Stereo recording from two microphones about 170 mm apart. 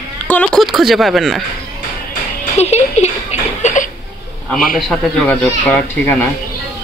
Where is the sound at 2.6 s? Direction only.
40° left (ahead or behind).